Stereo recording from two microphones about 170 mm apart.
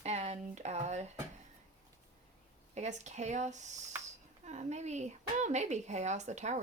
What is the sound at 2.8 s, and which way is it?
A woman's voice, 40° right (ahead or behind).